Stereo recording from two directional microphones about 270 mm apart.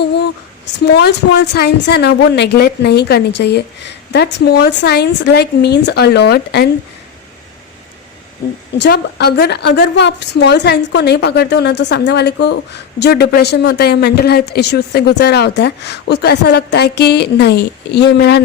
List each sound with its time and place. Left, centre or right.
0.2 s a woman's voice: left
8.8 s a woman's voice: left